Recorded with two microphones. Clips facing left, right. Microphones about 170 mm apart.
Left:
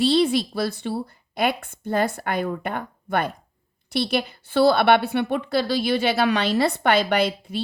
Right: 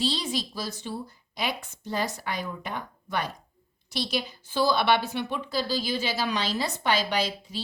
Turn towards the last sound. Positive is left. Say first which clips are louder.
# left 7 dB
turn(degrees=60)  # may be behind; listen again after turning